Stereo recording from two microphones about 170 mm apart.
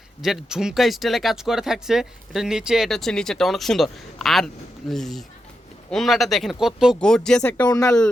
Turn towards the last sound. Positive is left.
turn(degrees=20)  # may be behind; listen again after turning